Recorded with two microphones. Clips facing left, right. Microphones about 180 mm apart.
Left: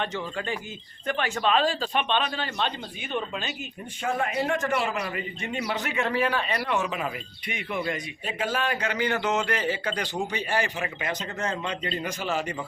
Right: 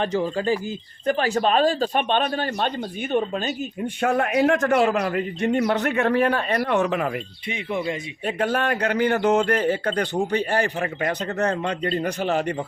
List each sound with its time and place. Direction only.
0.0 s a man's voice: 35° right (ahead or behind)
4.0 s a man's voice: 70° right (ahead or behind)
7.4 s speech: 25° right (ahead or behind)
8.4 s a man's voice: 60° right (ahead or behind)